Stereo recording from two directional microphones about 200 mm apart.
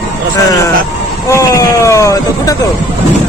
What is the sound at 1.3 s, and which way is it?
Hubbub, 15° left (ahead or behind).